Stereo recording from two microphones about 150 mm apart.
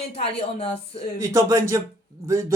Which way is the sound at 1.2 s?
20° right (ahead or behind).